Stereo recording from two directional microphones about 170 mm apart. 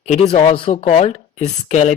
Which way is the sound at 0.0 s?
40° left (ahead or behind).